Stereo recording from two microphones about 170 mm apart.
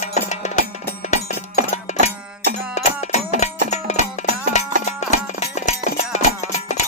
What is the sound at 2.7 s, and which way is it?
Music, 40° left (ahead or behind).